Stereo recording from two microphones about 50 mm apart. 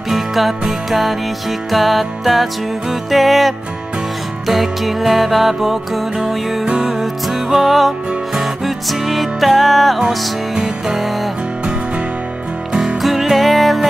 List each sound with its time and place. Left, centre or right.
0.1 s music: centre
10.0 s music: centre
12.7 s music: centre